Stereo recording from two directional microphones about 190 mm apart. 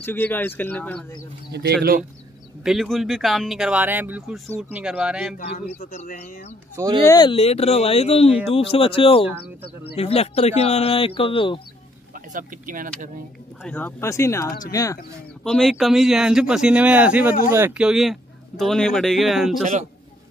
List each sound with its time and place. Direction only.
0.0 s speech: 10° left (ahead or behind)
1.5 s speech: 60° right (ahead or behind)
2.6 s speech: centre (ahead or behind)
5.5 s speech: 35° left (ahead or behind)
7.1 s speech: 25° left (ahead or behind)
12.3 s speech: 45° right (ahead or behind)
13.7 s speech: 10° left (ahead or behind)
15.4 s speech: centre (ahead or behind)
19.6 s a man's voice: 40° right (ahead or behind)